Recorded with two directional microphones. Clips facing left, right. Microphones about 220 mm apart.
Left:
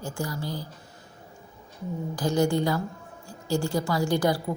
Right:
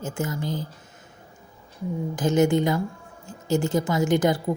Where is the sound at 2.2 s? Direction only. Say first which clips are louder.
Right 4 dB; 20° right (ahead or behind).